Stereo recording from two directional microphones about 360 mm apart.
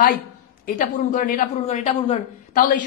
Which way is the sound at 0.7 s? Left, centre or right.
Left.